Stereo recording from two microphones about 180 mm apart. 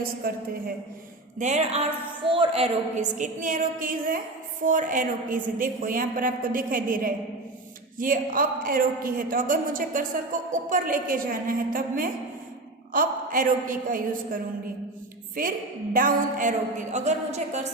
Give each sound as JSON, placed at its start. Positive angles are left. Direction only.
{"t": 0.2, "sound": "a woman's voice", "side_deg": -55}
{"t": 1.4, "sound": "a woman's voice", "side_deg": -40}